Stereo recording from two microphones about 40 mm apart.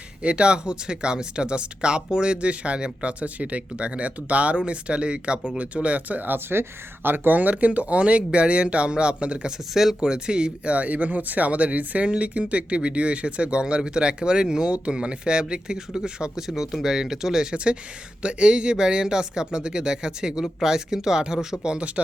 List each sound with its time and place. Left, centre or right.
0.2 s speech: right
6.3 s speech: right
7.3 s speech: right